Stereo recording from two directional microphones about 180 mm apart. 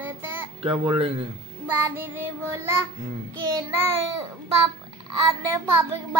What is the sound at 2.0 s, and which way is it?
Child singing, 15° right (ahead or behind).